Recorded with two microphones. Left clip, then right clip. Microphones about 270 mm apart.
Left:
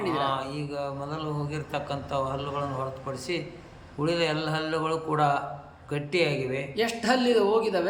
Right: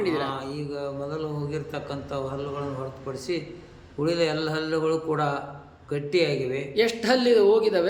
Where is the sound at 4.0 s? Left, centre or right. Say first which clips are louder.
Right 2 dB; centre.